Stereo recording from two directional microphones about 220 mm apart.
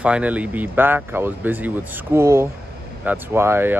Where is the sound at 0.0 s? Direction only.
5° right (ahead or behind).